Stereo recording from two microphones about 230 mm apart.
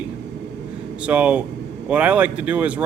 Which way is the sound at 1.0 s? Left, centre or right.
Centre.